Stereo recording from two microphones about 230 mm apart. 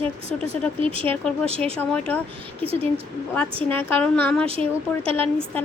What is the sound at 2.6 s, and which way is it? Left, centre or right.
Speech, right.